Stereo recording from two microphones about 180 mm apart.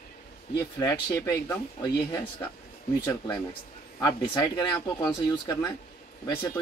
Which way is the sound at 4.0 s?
20° left (ahead or behind).